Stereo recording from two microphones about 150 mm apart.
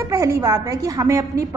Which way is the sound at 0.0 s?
20° right (ahead or behind).